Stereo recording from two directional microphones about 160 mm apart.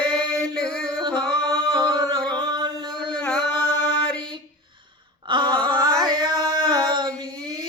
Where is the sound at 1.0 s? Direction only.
30° right (ahead or behind).